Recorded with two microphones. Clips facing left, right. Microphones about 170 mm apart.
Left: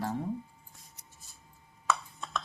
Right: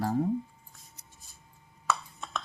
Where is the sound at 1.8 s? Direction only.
Centre (ahead or behind).